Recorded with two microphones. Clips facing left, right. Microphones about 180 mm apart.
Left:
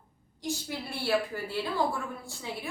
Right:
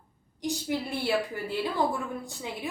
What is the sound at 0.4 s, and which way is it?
A woman's voice, 15° right (ahead or behind).